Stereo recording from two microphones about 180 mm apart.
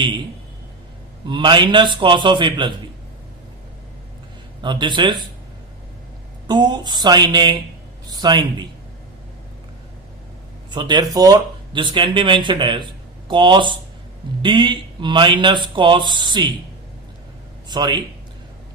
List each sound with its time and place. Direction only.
1.3 s speech: 25° right (ahead or behind)
4.6 s speech: 25° right (ahead or behind)
6.5 s a man's voice: 25° right (ahead or behind)
10.7 s speech: 25° right (ahead or behind)
17.7 s speech: 25° right (ahead or behind)